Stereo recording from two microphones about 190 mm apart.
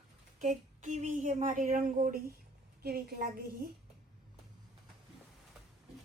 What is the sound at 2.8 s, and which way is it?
Speech, 55° right (ahead or behind).